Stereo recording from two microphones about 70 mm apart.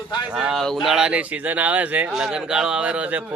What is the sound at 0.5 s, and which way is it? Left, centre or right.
A man's voice, centre.